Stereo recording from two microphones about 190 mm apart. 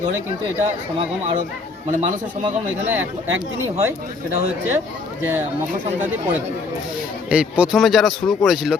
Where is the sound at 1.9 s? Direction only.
40° right (ahead or behind).